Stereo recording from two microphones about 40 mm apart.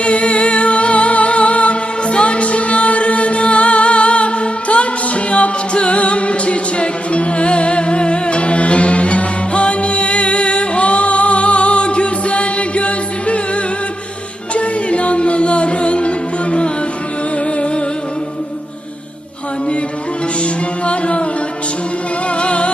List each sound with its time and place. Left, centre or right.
0.0 s music: left
14.5 s music: left
20.4 s music: left
22.4 s music: left